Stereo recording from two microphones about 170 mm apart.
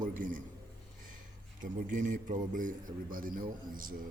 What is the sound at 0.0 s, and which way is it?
Speech, 55° right (ahead or behind).